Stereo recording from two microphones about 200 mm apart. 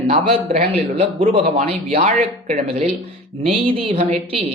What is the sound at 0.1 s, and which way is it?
Speech, 30° right (ahead or behind).